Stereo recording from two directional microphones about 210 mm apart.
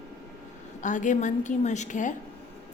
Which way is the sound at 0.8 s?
35° left (ahead or behind).